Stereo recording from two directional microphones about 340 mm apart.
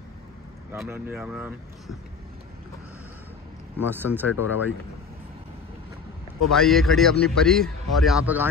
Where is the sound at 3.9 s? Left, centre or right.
Centre.